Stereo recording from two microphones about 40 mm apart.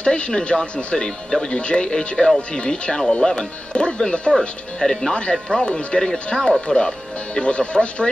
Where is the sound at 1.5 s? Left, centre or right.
Left.